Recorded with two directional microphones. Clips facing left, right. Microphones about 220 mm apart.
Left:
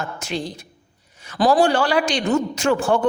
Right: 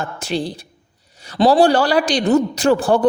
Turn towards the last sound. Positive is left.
turn(degrees=-35)  # may be behind; listen again after turning